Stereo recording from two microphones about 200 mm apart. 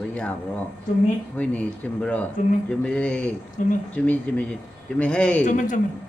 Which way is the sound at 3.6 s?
40° left (ahead or behind).